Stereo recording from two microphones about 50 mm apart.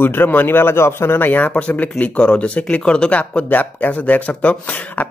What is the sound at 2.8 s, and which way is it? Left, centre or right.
Speech, centre.